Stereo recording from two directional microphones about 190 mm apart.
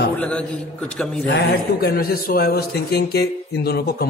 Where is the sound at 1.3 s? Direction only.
55° left (ahead or behind).